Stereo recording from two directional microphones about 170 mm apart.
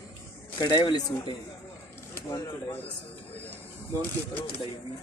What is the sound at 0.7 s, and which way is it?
Speech, 25° left (ahead or behind).